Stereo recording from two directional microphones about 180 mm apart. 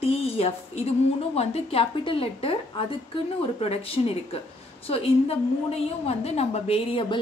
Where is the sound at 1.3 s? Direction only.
35° left (ahead or behind).